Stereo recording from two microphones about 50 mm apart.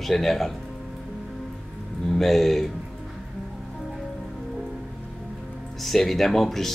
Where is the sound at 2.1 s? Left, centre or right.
Centre.